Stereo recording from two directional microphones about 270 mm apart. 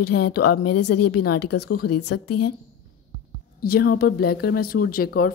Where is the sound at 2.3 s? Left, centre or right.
Left.